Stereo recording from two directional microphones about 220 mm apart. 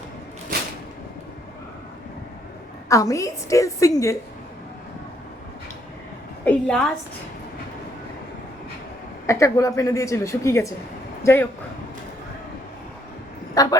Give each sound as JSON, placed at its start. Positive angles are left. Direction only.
{"t": 2.9, "sound": "a woman's voice", "side_deg": 15}
{"t": 6.4, "sound": "a woman's voice", "side_deg": 5}
{"t": 9.2, "sound": "a woman's voice", "side_deg": 15}
{"t": 13.5, "sound": "vehicle", "side_deg": 15}